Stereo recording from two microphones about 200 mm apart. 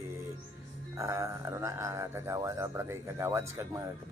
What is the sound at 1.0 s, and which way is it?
Speech, 15° right (ahead or behind).